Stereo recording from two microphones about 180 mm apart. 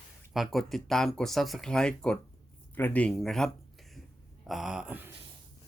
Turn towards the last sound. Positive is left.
turn(degrees=-10)  # may be behind; listen again after turning